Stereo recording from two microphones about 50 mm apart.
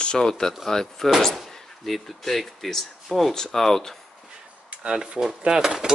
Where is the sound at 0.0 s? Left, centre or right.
Centre.